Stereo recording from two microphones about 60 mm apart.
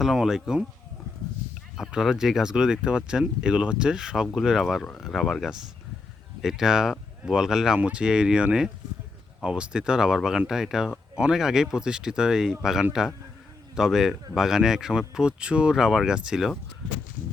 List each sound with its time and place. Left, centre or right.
0.0 s speech: centre
1.9 s speech: centre